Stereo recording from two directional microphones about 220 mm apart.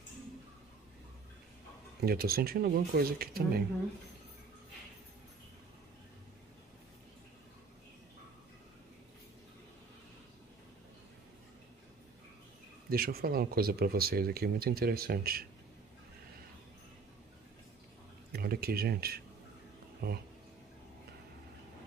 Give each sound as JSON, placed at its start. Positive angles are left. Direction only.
{"t": 2.0, "sound": "speech", "side_deg": -45}
{"t": 12.9, "sound": "speech", "side_deg": -45}
{"t": 18.3, "sound": "speech", "side_deg": -45}